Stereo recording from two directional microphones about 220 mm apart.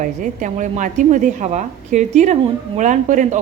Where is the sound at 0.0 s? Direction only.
35° right (ahead or behind).